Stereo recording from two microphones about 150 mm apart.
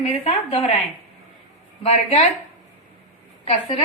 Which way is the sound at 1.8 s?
45° left (ahead or behind).